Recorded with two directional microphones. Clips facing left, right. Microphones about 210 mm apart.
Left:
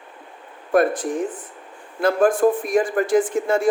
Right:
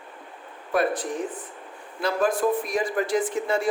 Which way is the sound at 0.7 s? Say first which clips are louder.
Left 6 dB; 50° left (ahead or behind).